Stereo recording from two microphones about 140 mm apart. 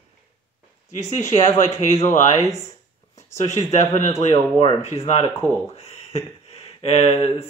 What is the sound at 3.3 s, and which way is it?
Speech, 55° left (ahead or behind).